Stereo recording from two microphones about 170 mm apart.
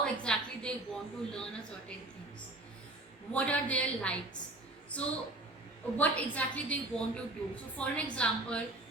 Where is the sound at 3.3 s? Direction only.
10° left (ahead or behind).